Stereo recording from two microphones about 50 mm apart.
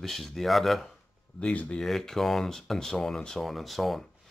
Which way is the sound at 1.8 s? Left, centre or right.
Centre.